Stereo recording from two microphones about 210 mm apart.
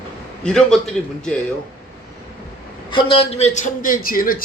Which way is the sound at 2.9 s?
25° left (ahead or behind).